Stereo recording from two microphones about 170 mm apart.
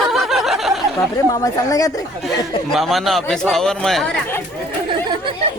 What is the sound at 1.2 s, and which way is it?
Speech, 20° left (ahead or behind).